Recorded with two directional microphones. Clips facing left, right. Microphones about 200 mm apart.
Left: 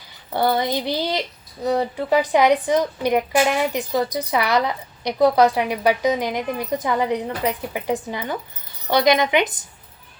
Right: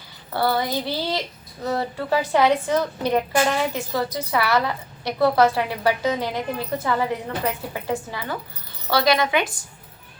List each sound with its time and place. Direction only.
0.3 s a woman's voice: 20° left (ahead or behind)